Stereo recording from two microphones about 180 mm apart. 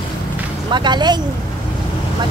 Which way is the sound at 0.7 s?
25° right (ahead or behind).